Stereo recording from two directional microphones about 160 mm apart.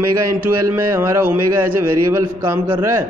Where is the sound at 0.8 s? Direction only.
15° right (ahead or behind).